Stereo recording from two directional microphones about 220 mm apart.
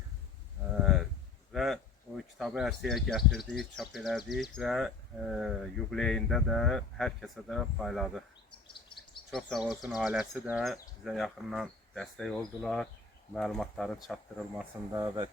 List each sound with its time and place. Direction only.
0.8 s a sound: centre (ahead or behind)
1.5 s speech: centre (ahead or behind)
9.3 s speech: centre (ahead or behind)
14.9 s speech: 15° right (ahead or behind)